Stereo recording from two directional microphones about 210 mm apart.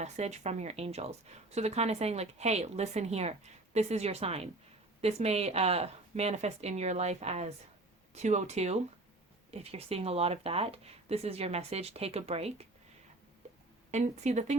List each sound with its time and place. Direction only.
0.0 s speech: 30° right (ahead or behind)
13.9 s speech: 35° right (ahead or behind)